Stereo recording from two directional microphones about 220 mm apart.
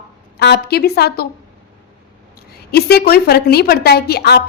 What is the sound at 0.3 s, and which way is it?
Speech, 50° left (ahead or behind).